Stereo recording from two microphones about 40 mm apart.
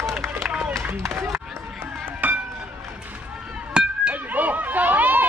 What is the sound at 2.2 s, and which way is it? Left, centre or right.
Run, right.